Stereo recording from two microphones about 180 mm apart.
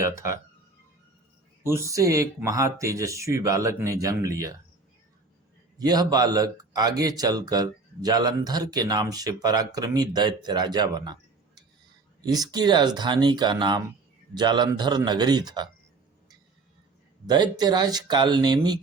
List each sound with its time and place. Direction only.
1.6 s speech: 15° right (ahead or behind)
5.8 s speech: 20° right (ahead or behind)
17.2 s speech: 25° right (ahead or behind)